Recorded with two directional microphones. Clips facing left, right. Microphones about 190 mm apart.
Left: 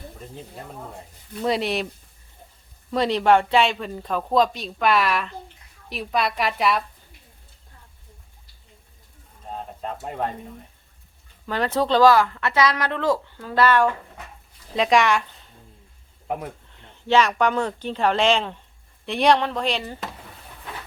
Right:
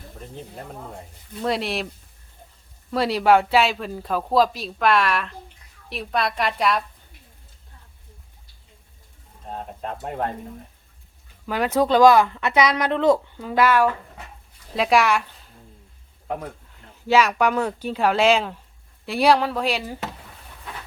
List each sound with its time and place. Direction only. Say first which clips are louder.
1.4 s speech: left 1 dB; centre (ahead or behind)
2.9 s speech: even; 5° right (ahead or behind)
9.8 s speech: right 1 dB; centre (ahead or behind)
11.4 s speech: right 2 dB; 10° right (ahead or behind)
16.2 s speech: left 1 dB; 10° left (ahead or behind)
16.9 s speech: right 1 dB; 5° right (ahead or behind)